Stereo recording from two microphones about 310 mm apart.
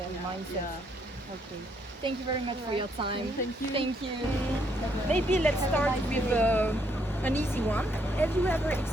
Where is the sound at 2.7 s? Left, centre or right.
Centre.